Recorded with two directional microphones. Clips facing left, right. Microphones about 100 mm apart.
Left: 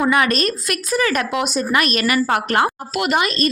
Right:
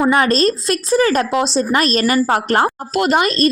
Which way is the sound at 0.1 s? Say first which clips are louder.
Right 4 dB; 30° right (ahead or behind).